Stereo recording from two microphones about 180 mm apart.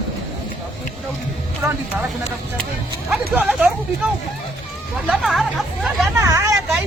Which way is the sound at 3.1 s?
5° right (ahead or behind).